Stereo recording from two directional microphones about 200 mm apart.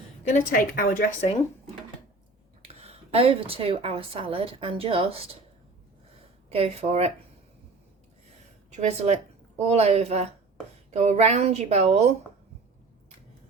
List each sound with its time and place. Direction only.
0.3 s a woman's voice: 40° left (ahead or behind)
2.6 s a woman's voice: 30° right (ahead or behind)
6.5 s a woman's voice: 30° right (ahead or behind)
8.7 s a woman's voice: 35° right (ahead or behind)